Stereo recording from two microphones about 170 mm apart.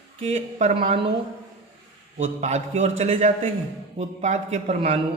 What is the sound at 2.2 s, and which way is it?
A man's voice, 40° right (ahead or behind).